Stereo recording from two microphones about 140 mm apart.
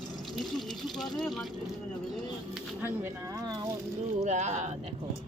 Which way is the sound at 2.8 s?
15° right (ahead or behind).